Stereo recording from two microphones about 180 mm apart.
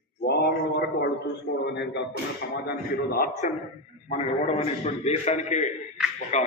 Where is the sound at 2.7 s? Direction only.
55° left (ahead or behind).